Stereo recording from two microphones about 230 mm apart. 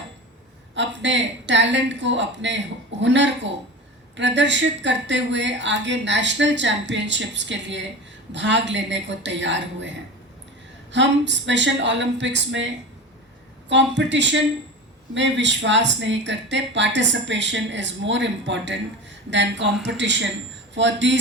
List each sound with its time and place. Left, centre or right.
0.8 s speech: right
10.9 s speech: right
13.7 s speech: right